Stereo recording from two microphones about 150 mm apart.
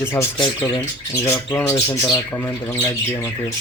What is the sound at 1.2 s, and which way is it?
Speech, 15° left (ahead or behind).